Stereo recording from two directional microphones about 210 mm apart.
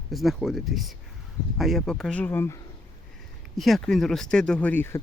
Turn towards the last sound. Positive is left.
turn(degrees=10)  # may be behind; listen again after turning